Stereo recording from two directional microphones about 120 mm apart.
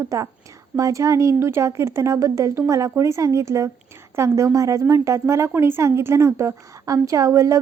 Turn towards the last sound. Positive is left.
turn(degrees=-25)  # may be behind; listen again after turning